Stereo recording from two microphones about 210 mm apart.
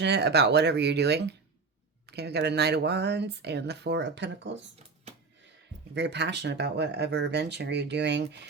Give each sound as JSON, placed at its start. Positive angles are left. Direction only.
{"t": 0.0, "sound": "speech", "side_deg": -50}
{"t": 5.9, "sound": "speech", "side_deg": -55}